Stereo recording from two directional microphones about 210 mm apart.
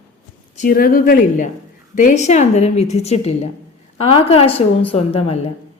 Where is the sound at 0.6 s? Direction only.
45° left (ahead or behind); by 4.6 s 30° left (ahead or behind).